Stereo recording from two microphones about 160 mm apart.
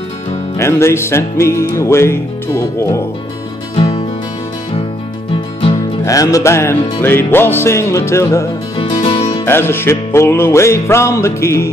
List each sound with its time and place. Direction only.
0.6 s music: 15° left (ahead or behind)
3.7 s music: 35° left (ahead or behind)
6.0 s music: 20° left (ahead or behind)
9.5 s music: 15° left (ahead or behind)